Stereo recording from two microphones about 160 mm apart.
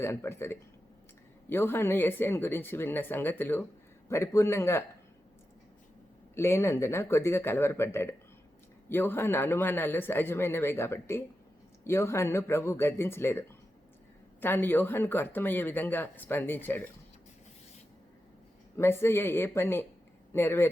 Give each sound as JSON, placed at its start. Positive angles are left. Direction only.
{"t": 0.0, "sound": "speech", "side_deg": 15}
{"t": 6.3, "sound": "speech", "side_deg": 15}
{"t": 14.4, "sound": "speech", "side_deg": 15}
{"t": 18.8, "sound": "speech", "side_deg": 15}